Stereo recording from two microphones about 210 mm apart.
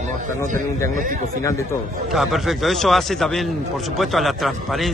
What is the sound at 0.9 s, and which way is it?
Speech, 40° right (ahead or behind).